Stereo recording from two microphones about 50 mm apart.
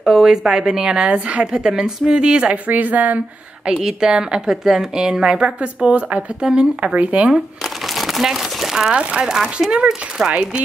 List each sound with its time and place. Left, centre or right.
0.0 s a woman's voice: centre
2.7 s speech: right
3.8 s a woman's voice: centre
6.4 s speech: centre
7.9 s crumpling: centre
8.7 s a woman's voice: centre